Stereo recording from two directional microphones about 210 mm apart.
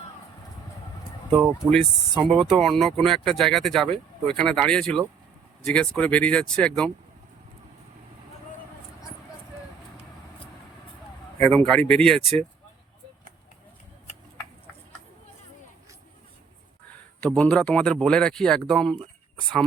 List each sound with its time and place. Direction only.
2.1 s speech: centre (ahead or behind)
11.3 s speech: 5° left (ahead or behind)
16.9 s speech: 5° left (ahead or behind)